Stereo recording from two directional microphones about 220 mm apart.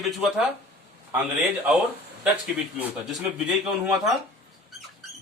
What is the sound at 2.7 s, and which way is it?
Speech, 5° right (ahead or behind).